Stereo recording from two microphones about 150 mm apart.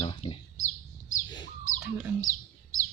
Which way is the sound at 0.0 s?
40° left (ahead or behind).